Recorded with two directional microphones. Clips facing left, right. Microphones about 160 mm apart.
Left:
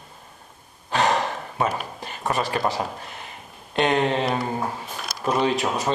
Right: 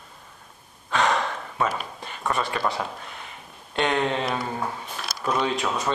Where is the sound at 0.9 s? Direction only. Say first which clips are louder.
Left 2 dB; 35° left (ahead or behind).